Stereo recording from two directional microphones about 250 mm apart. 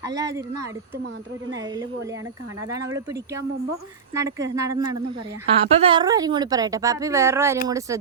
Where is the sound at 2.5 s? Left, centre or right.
Centre.